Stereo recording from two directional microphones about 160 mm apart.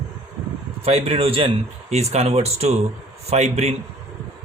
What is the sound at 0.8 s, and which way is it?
Speech, 40° right (ahead or behind).